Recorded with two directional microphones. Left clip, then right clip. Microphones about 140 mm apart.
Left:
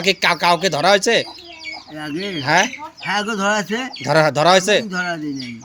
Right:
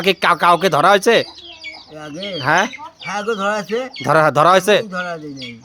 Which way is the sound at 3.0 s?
10° right (ahead or behind).